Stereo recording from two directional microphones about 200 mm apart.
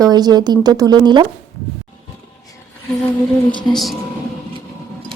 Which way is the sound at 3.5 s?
20° left (ahead or behind).